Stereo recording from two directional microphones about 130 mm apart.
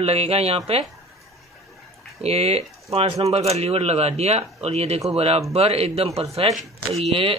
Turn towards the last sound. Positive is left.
turn(degrees=0)  # may be behind; listen again after turning